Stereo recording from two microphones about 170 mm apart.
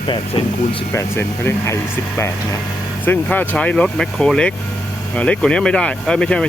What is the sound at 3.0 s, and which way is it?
Speech, 10° left (ahead or behind).